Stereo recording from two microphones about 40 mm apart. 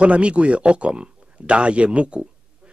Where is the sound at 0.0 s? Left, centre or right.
Right.